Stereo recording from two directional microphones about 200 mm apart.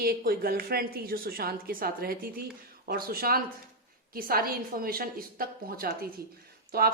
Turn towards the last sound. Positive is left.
turn(degrees=-50)  # may be behind; listen again after turning